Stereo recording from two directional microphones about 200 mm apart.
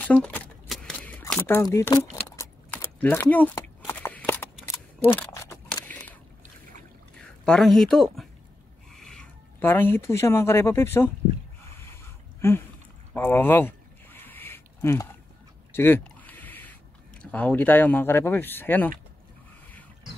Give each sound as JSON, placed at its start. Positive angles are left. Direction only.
{"t": 0.0, "sound": "shuffling cards", "side_deg": 5}
{"t": 2.3, "sound": "a sound", "side_deg": 15}
{"t": 4.6, "sound": "camera", "side_deg": 10}
{"t": 7.4, "sound": "speech", "side_deg": 5}
{"t": 12.4, "sound": "speech", "side_deg": 10}
{"t": 13.1, "sound": "a sound", "side_deg": 10}
{"t": 17.2, "sound": "speech", "side_deg": 5}